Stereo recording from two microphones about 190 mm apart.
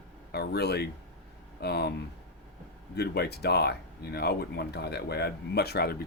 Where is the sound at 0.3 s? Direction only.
60° left (ahead or behind).